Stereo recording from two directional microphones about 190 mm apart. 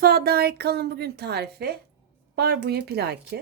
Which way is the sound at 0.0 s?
55° right (ahead or behind).